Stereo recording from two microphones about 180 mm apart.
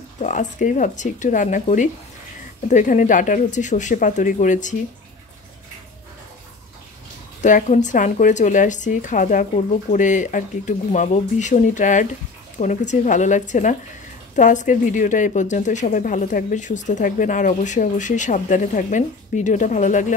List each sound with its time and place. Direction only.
0.2 s a woman's voice: 45° left (ahead or behind)
7.4 s a woman's voice: 45° left (ahead or behind)